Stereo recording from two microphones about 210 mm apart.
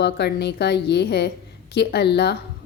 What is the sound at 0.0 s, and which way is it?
A woman's voice, 50° left (ahead or behind).